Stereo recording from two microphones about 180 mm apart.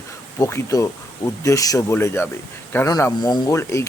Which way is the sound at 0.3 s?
15° left (ahead or behind).